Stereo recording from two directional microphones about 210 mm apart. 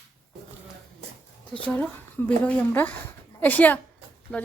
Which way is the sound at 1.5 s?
5° left (ahead or behind).